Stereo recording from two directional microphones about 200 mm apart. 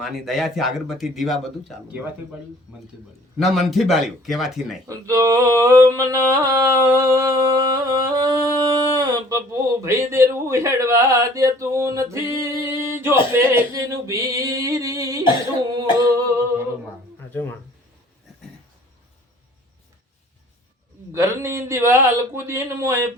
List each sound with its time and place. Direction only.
0.0 s a man's voice: centre (ahead or behind)
3.3 s a man's voice: centre (ahead or behind)
4.9 s speech: 15° right (ahead or behind)
15.7 s a sound: 20° right (ahead or behind)
21.1 s speech: 15° right (ahead or behind)